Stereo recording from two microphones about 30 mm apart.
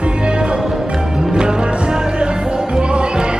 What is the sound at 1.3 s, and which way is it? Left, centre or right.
Music, right.